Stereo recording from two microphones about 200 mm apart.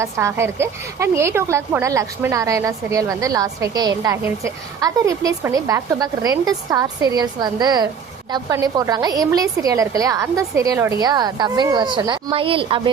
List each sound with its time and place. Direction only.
0.0 s a woman's voice: 15° right (ahead or behind)